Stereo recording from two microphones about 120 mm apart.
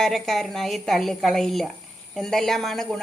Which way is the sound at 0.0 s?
5° left (ahead or behind).